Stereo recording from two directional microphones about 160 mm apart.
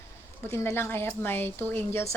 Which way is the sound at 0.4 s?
15° left (ahead or behind).